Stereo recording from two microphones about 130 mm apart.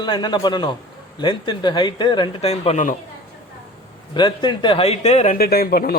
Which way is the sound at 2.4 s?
55° left (ahead or behind).